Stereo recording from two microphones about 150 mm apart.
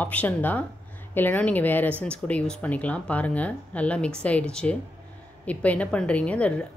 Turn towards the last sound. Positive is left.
turn(degrees=10)  # may be behind; listen again after turning